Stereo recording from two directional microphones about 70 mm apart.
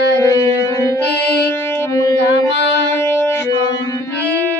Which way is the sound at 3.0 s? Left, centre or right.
Left.